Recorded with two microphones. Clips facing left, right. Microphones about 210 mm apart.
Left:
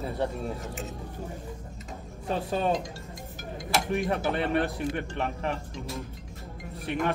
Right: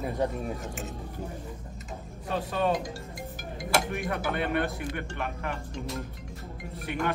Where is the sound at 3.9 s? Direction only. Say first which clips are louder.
Left 4 dB; 30° left (ahead or behind).